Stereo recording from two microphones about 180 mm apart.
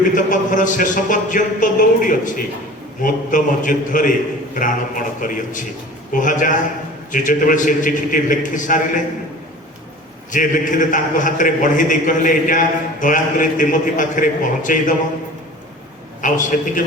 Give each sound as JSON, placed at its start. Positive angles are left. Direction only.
{"t": 0.1, "sound": "a man's voice", "side_deg": 45}
{"t": 10.3, "sound": "a man's voice", "side_deg": 45}
{"t": 16.2, "sound": "a man's voice", "side_deg": 45}